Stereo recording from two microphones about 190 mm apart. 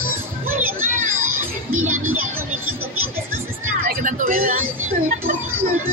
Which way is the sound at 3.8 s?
45° right (ahead or behind).